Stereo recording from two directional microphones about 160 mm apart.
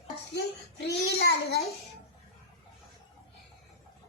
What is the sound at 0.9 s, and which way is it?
Speech, 90° left.